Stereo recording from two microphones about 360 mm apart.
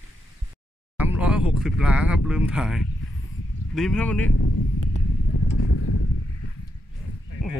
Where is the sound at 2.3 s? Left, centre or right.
Centre.